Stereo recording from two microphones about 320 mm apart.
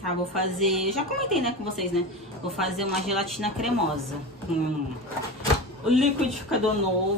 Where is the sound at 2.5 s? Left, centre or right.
Centre.